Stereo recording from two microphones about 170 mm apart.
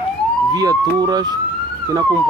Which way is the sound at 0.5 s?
20° right (ahead or behind).